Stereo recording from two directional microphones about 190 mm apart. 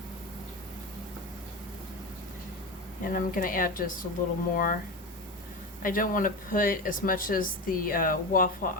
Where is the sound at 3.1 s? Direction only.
45° left (ahead or behind).